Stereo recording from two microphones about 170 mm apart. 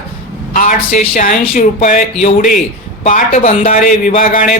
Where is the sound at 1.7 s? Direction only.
45° left (ahead or behind).